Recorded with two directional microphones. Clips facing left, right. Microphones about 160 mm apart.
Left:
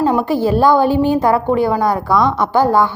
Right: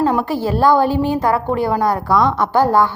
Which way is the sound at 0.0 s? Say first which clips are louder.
Left 2 dB; 20° left (ahead or behind).